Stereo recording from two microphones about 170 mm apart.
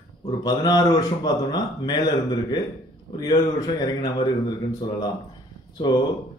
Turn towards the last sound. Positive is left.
turn(degrees=25)  # may be behind; listen again after turning